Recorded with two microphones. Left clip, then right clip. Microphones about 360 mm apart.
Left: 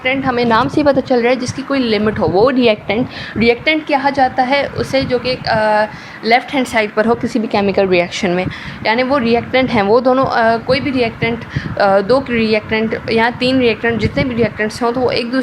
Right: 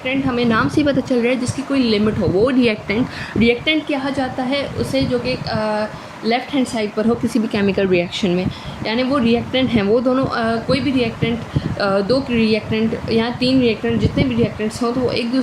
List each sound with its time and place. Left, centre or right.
0.0 s a woman's voice: centre